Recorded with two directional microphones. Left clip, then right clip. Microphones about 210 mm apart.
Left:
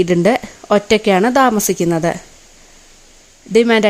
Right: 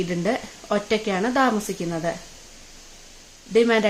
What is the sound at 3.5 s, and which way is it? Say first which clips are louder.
Speech: left 6 dB; 45° left (ahead or behind).